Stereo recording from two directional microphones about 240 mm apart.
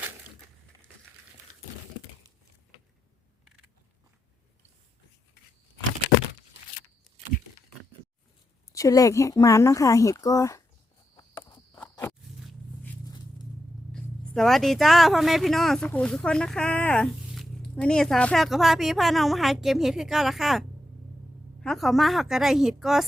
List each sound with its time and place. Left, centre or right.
8.7 s speech: centre
11.2 s walk: centre
13.9 s speech: centre